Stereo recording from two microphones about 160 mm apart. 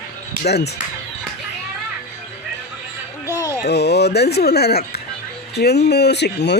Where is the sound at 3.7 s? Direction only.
90° left.